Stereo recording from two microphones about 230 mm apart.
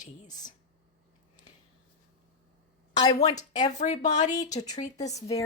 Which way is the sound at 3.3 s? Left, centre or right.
Left.